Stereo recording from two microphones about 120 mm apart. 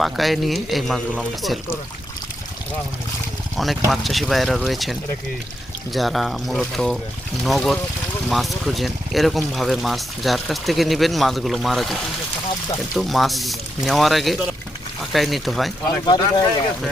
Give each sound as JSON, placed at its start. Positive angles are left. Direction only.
{"t": 0.0, "sound": "speech", "side_deg": 0}
{"t": 3.8, "sound": "speech", "side_deg": 0}
{"t": 16.0, "sound": "speech", "side_deg": 35}